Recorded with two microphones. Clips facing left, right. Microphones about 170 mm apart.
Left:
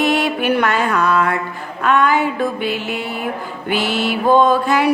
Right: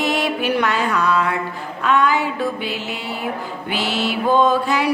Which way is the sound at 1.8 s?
55° left (ahead or behind).